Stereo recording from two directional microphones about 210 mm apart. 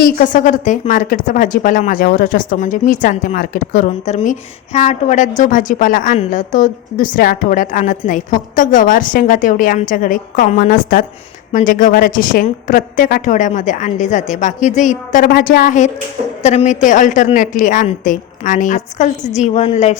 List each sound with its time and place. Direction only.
0.2 s speech: 35° left (ahead or behind)